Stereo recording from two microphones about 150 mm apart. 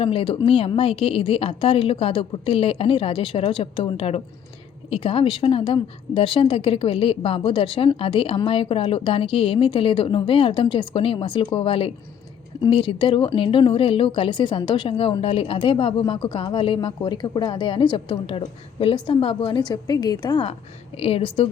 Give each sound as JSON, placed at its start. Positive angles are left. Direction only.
{"t": 0.0, "sound": "speech", "side_deg": 40}
{"t": 21.0, "sound": "speech", "side_deg": 40}